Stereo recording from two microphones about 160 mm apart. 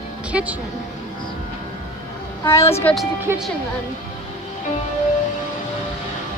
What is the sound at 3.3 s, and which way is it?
Speech, 15° right (ahead or behind).